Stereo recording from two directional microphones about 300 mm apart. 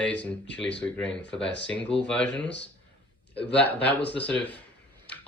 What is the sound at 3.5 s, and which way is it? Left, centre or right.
Speech, centre.